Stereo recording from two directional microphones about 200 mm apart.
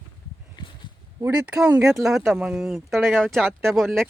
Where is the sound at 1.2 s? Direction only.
5° right (ahead or behind).